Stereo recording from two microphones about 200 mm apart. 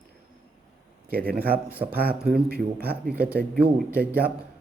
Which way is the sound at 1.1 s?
50° right (ahead or behind).